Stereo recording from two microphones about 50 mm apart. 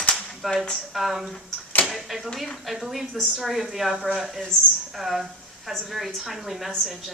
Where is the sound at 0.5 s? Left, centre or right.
Centre.